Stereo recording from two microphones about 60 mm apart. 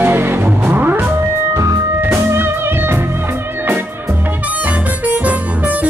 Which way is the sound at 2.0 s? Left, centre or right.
Right.